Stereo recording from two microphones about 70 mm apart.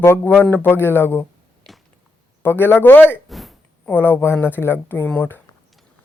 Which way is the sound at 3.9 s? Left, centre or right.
Left.